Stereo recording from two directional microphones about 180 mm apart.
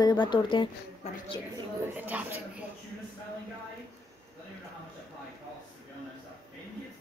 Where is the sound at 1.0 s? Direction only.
40° left (ahead or behind).